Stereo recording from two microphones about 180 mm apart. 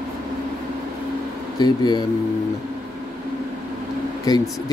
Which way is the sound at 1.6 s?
25° left (ahead or behind).